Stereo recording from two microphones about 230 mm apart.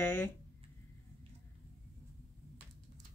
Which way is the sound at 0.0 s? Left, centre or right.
Centre.